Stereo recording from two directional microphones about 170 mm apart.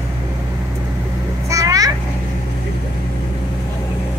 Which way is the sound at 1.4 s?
20° right (ahead or behind).